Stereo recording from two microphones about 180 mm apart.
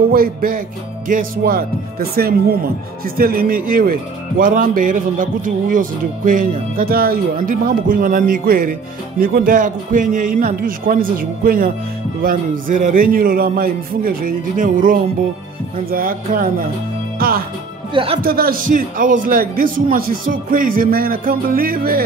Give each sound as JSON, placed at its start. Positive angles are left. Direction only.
{"t": 0.1, "sound": "speech", "side_deg": -55}